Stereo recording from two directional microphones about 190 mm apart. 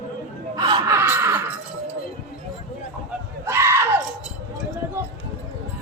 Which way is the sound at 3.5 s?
15° right (ahead or behind).